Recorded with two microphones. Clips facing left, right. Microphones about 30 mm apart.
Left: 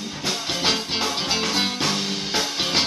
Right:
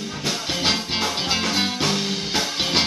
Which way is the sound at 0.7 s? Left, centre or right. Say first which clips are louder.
Even; centre.